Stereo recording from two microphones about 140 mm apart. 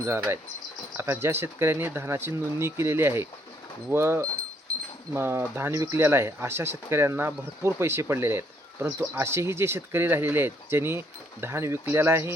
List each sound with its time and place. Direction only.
0.9 s speech: 20° right (ahead or behind)